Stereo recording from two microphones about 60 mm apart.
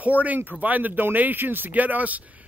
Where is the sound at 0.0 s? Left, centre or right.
Right.